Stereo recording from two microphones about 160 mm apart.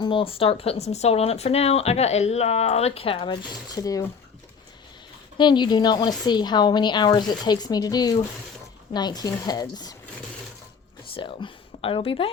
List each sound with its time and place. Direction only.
0.0 s speech: 30° left (ahead or behind)
5.4 s a woman's voice: 30° left (ahead or behind)
11.1 s speech: 30° left (ahead or behind)